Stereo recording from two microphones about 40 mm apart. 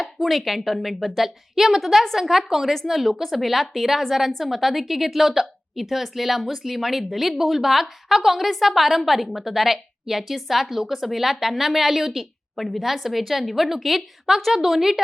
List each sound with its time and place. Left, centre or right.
0.2 s a woman's voice: centre